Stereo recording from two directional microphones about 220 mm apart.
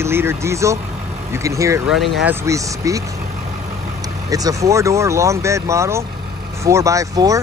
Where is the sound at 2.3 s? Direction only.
10° right (ahead or behind).